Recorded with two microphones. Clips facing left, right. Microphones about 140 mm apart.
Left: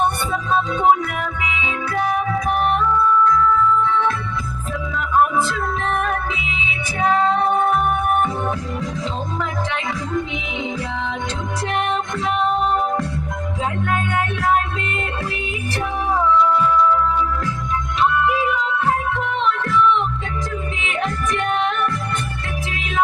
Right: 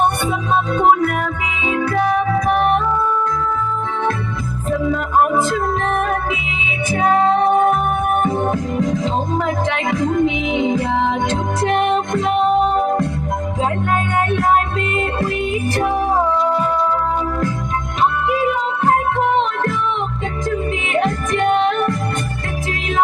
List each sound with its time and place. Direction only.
0.7 s music: 50° right (ahead or behind)
7.3 s music: 45° right (ahead or behind)
13.6 s music: 45° right (ahead or behind)